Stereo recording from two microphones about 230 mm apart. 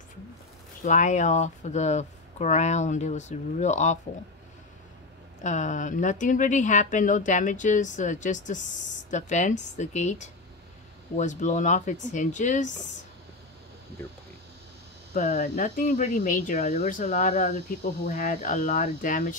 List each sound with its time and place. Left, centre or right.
0.8 s speech: left
5.4 s speech: left
15.1 s speech: left